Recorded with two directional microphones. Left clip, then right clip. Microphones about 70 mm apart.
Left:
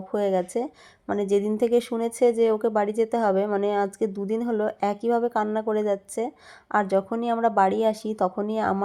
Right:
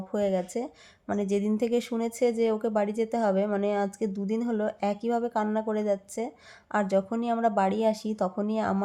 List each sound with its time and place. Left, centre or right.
0.1 s a woman's voice: left